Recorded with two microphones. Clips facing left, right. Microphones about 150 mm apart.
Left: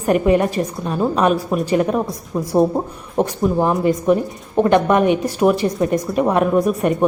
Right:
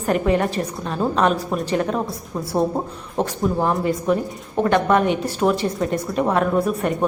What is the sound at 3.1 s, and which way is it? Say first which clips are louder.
A woman's voice: left 4 dB; 15° left (ahead or behind).